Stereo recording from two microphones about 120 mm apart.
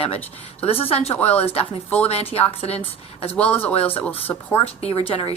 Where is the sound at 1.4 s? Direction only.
55° left (ahead or behind).